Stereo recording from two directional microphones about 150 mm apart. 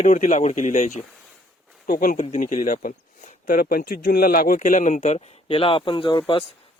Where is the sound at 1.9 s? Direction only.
70° left (ahead or behind).